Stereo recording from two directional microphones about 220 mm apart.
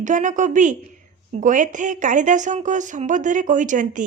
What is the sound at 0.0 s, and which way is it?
A woman's voice, 35° right (ahead or behind).